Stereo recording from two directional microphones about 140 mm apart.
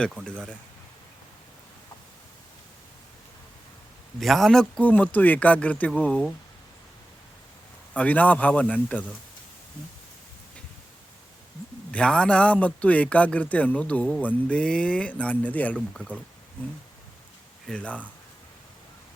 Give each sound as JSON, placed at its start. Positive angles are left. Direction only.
{"t": 0.3, "sound": "a man's voice", "side_deg": 5}
{"t": 4.2, "sound": "a man's voice", "side_deg": 0}
{"t": 7.9, "sound": "a man's voice", "side_deg": 10}
{"t": 11.9, "sound": "a man's voice", "side_deg": 5}
{"t": 17.7, "sound": "a man's voice", "side_deg": 10}